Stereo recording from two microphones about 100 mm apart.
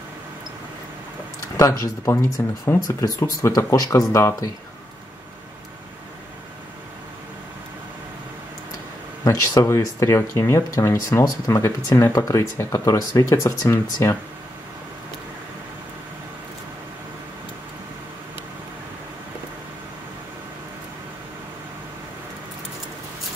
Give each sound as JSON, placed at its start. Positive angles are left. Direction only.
{"t": 1.6, "sound": "speech", "side_deg": 30}
{"t": 9.2, "sound": "speech", "side_deg": 35}